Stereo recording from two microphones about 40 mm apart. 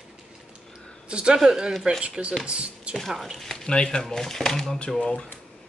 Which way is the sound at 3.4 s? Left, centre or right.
Centre.